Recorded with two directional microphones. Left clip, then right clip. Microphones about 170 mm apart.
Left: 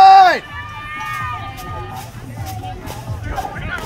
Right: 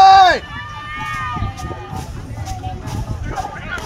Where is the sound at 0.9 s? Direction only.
45° right (ahead or behind).